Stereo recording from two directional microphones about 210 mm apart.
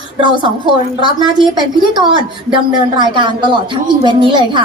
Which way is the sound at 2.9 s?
20° right (ahead or behind).